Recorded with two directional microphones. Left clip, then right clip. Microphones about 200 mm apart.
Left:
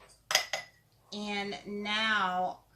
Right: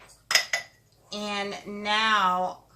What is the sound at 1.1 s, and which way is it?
A woman's voice, 10° right (ahead or behind).